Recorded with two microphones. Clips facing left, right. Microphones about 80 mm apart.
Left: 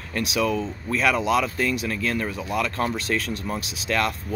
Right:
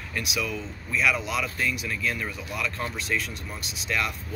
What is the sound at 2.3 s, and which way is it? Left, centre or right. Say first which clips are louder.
Speech: left 6 dB; left.